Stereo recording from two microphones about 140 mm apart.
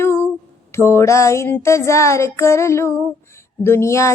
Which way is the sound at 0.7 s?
20° left (ahead or behind).